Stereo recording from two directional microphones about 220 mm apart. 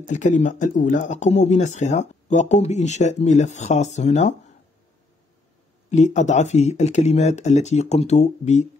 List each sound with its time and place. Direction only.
0.0 s speech: 35° left (ahead or behind)
5.9 s speech: 30° left (ahead or behind)